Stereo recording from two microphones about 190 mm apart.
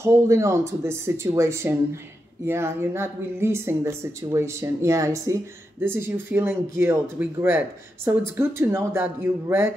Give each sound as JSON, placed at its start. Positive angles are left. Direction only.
{"t": 0.0, "sound": "speech", "side_deg": -15}